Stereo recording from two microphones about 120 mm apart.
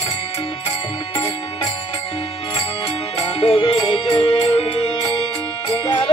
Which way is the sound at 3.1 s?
55° left (ahead or behind).